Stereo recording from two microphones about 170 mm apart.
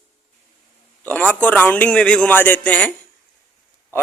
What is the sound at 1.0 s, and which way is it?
A man's voice, 10° left (ahead or behind).